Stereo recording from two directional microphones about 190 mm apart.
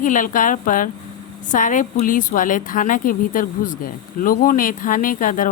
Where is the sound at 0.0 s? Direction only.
45° left (ahead or behind).